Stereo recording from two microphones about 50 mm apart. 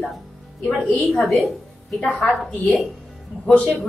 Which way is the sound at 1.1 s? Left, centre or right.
Centre.